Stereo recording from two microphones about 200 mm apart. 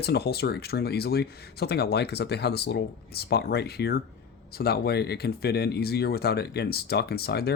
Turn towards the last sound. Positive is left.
turn(degrees=50)  # may be behind; listen again after turning